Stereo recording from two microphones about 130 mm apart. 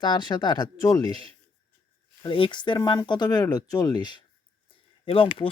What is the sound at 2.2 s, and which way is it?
Speech, 40° left (ahead or behind).